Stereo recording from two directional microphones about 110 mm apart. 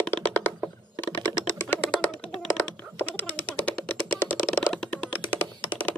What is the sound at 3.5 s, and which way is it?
Typing, 15° left (ahead or behind).